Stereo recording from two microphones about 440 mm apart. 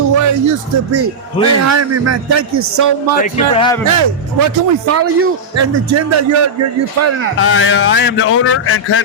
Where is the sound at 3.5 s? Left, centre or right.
Centre.